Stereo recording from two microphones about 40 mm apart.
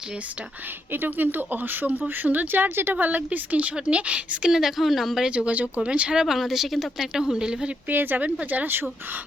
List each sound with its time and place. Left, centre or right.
0.9 s speech: right
4.5 s a woman's voice: centre
5.5 s speech: right
5.8 s speech: right
6.2 s a woman's voice: centre
7.9 s speech: right